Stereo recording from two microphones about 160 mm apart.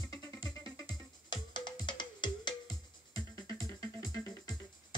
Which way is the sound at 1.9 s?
30° left (ahead or behind).